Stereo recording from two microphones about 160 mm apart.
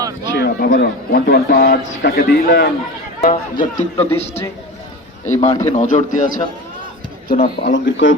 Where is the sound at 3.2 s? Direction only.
55° left (ahead or behind).